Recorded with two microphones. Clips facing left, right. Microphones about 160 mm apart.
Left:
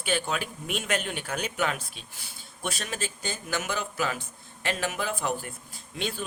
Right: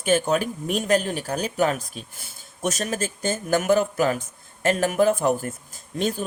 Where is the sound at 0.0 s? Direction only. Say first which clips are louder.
Right 8 dB; 45° right (ahead or behind).